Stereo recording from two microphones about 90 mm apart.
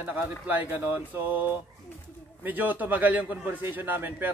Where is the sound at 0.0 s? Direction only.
20° right (ahead or behind).